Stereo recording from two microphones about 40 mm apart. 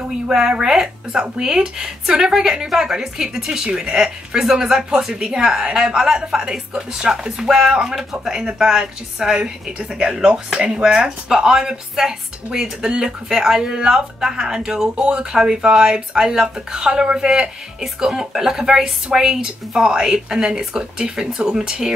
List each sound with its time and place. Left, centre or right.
0.3 s speech: centre